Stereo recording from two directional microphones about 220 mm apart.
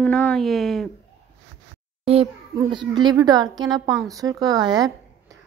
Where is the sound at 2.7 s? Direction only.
20° right (ahead or behind).